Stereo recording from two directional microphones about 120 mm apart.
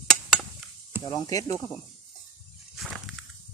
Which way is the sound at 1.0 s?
30° left (ahead or behind).